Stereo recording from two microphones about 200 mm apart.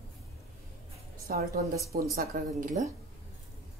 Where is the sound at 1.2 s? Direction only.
50° right (ahead or behind).